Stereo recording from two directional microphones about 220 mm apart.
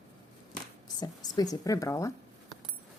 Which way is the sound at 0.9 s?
15° left (ahead or behind).